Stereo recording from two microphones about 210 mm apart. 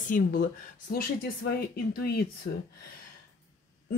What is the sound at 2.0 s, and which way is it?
Speech, 50° left (ahead or behind).